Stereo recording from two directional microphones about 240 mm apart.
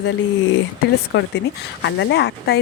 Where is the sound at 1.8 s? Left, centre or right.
Left.